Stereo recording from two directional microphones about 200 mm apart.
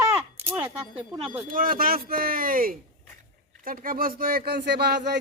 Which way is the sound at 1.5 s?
45° right (ahead or behind).